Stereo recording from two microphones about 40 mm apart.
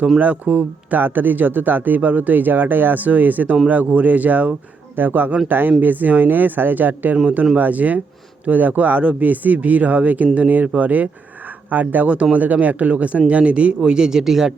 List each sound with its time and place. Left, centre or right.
0.2 s speech: right
0.9 s speech: right
4.9 s speech: right; by 14.5 s centre